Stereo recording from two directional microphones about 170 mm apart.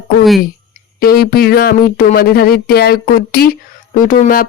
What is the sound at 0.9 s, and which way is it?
Speech, 60° left (ahead or behind).